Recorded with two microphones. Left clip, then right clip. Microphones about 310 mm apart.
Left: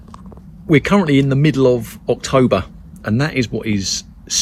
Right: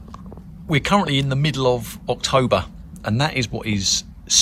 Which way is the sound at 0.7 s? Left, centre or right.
Centre.